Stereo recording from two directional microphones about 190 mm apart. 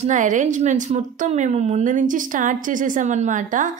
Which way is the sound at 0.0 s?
40° right (ahead or behind).